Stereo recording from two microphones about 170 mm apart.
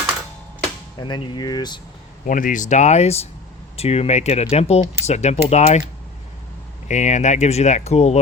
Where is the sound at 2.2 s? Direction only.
50° left (ahead or behind).